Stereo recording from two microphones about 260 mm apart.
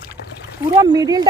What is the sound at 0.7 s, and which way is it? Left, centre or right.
Speech, centre.